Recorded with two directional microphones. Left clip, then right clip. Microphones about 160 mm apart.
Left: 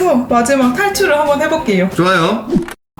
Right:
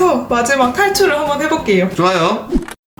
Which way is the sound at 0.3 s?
20° right (ahead or behind).